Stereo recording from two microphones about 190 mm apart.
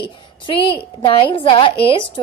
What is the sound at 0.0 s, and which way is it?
A woman's voice, 25° left (ahead or behind).